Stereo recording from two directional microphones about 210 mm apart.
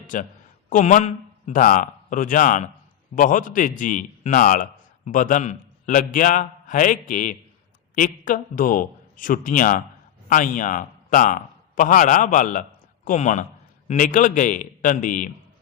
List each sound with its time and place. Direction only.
0.1 s a man's voice: 40° left (ahead or behind)